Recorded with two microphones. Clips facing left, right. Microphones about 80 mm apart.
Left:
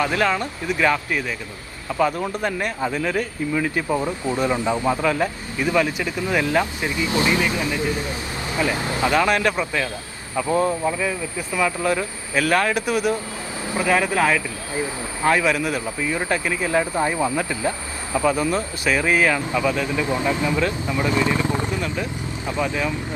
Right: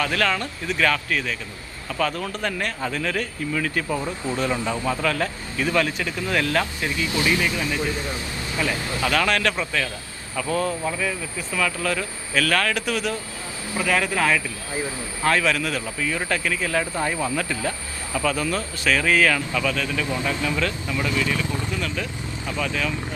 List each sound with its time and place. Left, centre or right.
0.0 s speech: left